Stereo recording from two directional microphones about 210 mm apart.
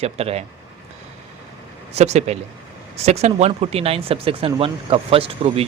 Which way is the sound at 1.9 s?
30° right (ahead or behind).